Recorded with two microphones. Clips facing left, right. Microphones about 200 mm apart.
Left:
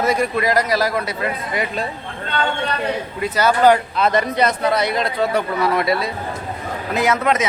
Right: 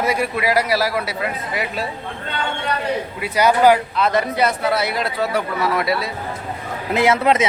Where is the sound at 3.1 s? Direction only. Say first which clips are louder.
Right 1 dB; 10° right (ahead or behind).